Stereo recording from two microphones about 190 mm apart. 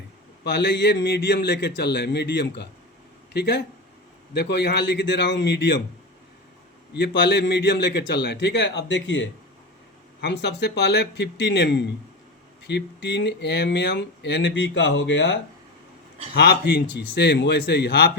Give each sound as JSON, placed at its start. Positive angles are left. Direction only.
{"t": 0.4, "sound": "speech", "side_deg": 65}
{"t": 6.9, "sound": "speech", "side_deg": 65}
{"t": 10.2, "sound": "speech", "side_deg": 60}
{"t": 16.3, "sound": "speech", "side_deg": 60}